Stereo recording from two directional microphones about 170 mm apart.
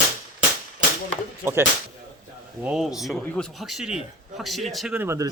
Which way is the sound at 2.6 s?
Centre (ahead or behind).